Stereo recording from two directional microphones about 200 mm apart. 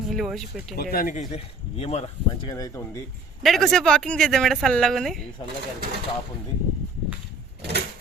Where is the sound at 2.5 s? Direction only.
20° left (ahead or behind).